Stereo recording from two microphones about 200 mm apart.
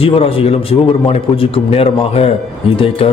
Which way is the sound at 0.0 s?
30° left (ahead or behind).